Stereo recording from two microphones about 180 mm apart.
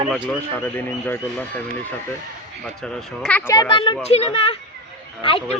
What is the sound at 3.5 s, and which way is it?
Speech, 25° left (ahead or behind).